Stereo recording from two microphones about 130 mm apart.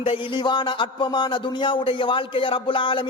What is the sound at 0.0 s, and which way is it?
Speech, 40° left (ahead or behind).